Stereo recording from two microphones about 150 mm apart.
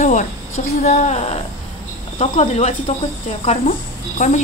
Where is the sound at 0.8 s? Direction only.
50° left (ahead or behind).